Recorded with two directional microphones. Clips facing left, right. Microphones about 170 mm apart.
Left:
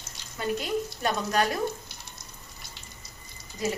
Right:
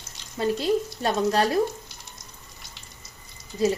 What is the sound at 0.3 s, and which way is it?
Speech, 30° right (ahead or behind).